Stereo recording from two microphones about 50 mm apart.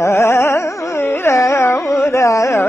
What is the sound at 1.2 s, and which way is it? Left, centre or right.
Carnatic music, left.